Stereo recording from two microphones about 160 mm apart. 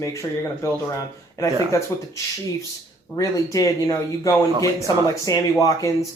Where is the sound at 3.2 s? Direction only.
20° left (ahead or behind).